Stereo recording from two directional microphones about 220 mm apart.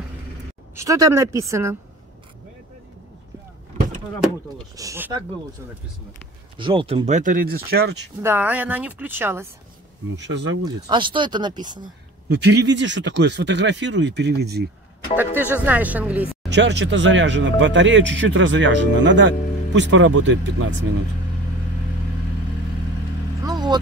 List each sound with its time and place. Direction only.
0.7 s speech: 15° right (ahead or behind)
4.7 s speech: 10° right (ahead or behind)
6.6 s speech: 25° right (ahead or behind); by 7.9 s 45° right (ahead or behind)
8.2 s speech: 10° right (ahead or behind)
10.1 s speech: 55° right (ahead or behind)
10.6 s speech: 20° right (ahead or behind)
12.3 s speech: 50° right (ahead or behind)
15.5 s speech: 10° right (ahead or behind)
16.4 s speech: 50° right (ahead or behind)
23.4 s vehicle: 20° right (ahead or behind)